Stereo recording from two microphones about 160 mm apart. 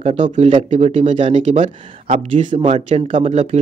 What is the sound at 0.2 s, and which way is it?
Speech, 45° right (ahead or behind).